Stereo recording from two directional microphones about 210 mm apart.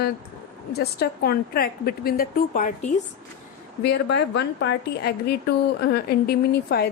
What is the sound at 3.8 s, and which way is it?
A woman's voice, 55° left (ahead or behind).